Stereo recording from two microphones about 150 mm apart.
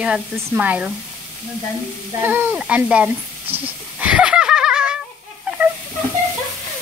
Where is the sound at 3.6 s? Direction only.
10° right (ahead or behind).